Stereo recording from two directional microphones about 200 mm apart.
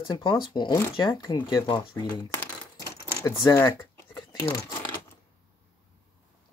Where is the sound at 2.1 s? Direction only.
15° left (ahead or behind).